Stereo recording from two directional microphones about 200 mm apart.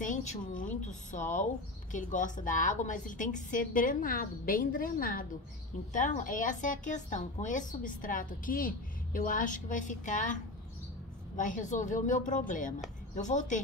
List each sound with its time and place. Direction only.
0.0 s a woman's voice: 35° left (ahead or behind)